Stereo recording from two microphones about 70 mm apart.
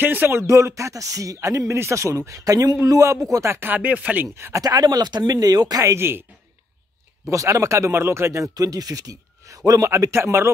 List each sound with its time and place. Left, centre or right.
0.0 s speech: right
3.5 s chopping: right
4.6 s speech: right
5.9 s a man's voice: right
7.2 s speech: right
10.1 s a man's voice: right